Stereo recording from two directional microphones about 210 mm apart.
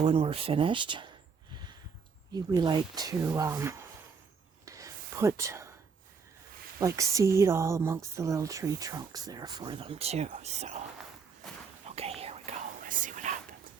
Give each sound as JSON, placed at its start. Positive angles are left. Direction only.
{"t": 0.0, "sound": "speech", "side_deg": -25}
{"t": 2.3, "sound": "speech", "side_deg": -20}
{"t": 4.6, "sound": "whispering", "side_deg": -15}
{"t": 6.7, "sound": "speech", "side_deg": -15}
{"t": 11.9, "sound": "whispering", "side_deg": -30}